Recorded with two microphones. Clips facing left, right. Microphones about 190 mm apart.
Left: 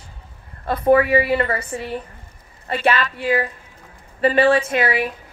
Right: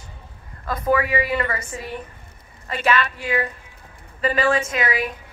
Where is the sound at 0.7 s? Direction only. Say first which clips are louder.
Left 6 dB; 30° left (ahead or behind).